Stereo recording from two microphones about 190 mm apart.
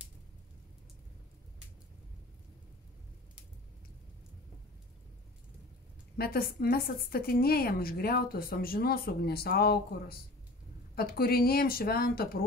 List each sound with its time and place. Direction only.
6.1 s a woman's voice: 55° left (ahead or behind)